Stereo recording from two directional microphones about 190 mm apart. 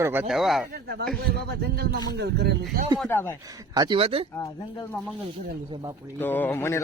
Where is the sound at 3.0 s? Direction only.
10° left (ahead or behind).